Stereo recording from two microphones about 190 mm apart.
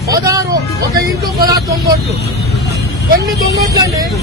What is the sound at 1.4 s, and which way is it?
Speech, 50° right (ahead or behind).